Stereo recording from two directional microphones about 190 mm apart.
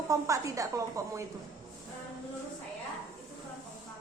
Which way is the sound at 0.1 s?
15° right (ahead or behind).